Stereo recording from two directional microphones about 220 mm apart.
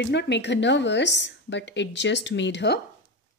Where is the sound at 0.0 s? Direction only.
50° left (ahead or behind).